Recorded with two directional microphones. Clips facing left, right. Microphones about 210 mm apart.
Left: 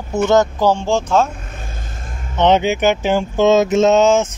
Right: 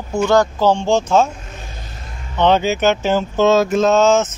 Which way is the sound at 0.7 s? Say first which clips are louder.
Right 1 dB; centre (ahead or behind).